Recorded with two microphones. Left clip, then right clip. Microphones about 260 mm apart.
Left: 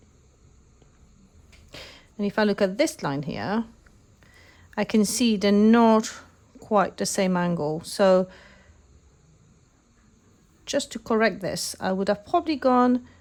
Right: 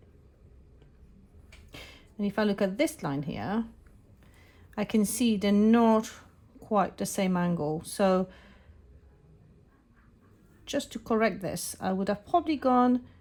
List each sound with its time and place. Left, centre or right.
1.7 s a woman's voice: left
10.7 s speech: left